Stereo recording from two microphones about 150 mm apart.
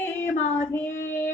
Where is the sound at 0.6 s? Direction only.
15° left (ahead or behind).